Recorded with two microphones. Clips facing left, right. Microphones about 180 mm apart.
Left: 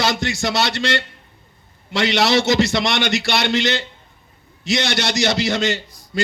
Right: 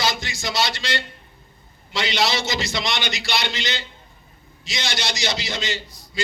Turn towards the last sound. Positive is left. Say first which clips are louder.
# left 6 dB
turn(degrees=60)  # may be behind; listen again after turning